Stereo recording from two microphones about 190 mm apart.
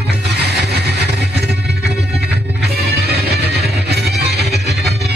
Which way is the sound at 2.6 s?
60° right (ahead or behind).